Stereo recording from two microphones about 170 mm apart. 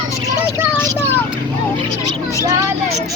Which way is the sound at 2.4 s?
20° right (ahead or behind).